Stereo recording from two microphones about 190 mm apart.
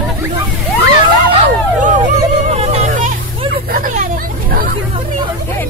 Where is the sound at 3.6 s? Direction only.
50° right (ahead or behind).